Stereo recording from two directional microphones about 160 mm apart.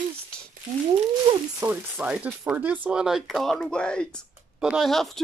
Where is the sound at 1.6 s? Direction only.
10° right (ahead or behind).